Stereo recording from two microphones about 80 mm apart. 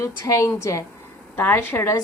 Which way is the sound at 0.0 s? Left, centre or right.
Left.